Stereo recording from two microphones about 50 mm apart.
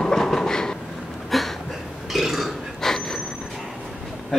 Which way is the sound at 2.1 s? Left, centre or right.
Centre.